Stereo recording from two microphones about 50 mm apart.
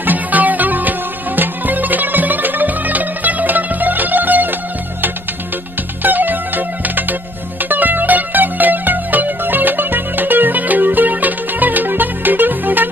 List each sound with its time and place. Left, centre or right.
0.0 s music: right
6.0 s music: right